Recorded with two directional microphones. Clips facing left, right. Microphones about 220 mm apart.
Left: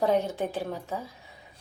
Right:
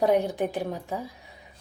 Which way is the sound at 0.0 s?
15° right (ahead or behind).